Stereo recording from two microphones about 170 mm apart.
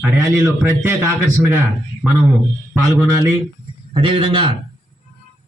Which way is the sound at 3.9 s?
30° right (ahead or behind).